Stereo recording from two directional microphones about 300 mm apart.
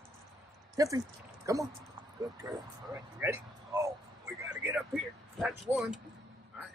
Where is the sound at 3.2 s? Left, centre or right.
Centre.